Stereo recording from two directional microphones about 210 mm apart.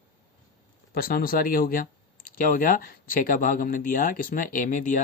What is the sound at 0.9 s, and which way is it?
Speech, 45° left (ahead or behind).